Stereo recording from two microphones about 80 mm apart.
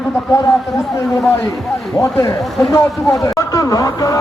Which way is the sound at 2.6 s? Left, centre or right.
Left.